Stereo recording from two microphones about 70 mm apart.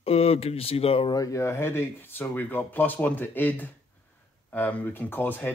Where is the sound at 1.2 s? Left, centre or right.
Left.